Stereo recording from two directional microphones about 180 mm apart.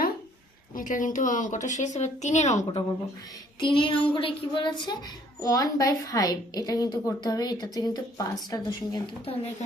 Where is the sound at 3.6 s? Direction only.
25° left (ahead or behind).